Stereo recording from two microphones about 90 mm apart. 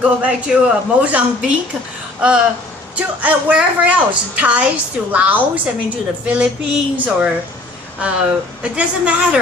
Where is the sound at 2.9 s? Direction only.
15° right (ahead or behind).